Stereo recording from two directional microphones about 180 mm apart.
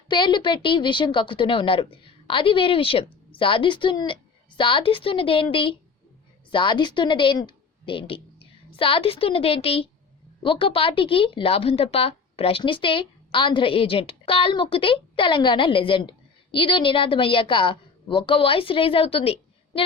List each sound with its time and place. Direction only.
0.1 s a woman's voice: 25° left (ahead or behind)